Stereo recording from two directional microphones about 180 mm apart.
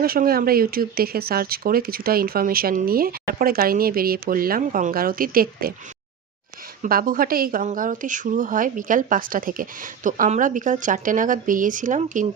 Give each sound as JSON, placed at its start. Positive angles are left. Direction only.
{"t": 0.0, "sound": "speech", "side_deg": -55}
{"t": 6.8, "sound": "speech", "side_deg": -50}